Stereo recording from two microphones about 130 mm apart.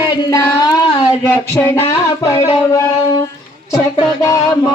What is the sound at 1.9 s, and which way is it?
Music, 25° left (ahead or behind).